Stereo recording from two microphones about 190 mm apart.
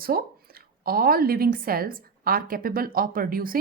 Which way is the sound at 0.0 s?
50° right (ahead or behind).